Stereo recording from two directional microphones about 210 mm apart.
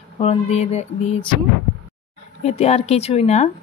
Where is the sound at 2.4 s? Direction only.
30° left (ahead or behind).